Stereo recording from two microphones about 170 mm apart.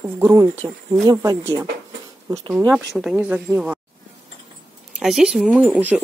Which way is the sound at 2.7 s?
Centre (ahead or behind).